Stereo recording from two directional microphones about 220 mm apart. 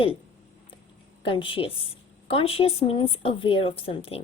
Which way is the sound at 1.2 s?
25° left (ahead or behind).